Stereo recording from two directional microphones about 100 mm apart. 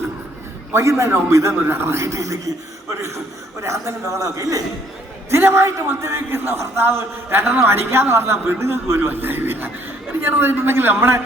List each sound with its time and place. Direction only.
0.7 s a man's voice: 30° right (ahead or behind)
3.6 s a man's voice: 30° right (ahead or behind)
5.3 s a man's voice: 25° right (ahead or behind)